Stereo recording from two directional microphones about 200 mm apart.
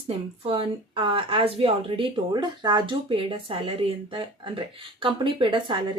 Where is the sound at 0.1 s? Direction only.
30° right (ahead or behind).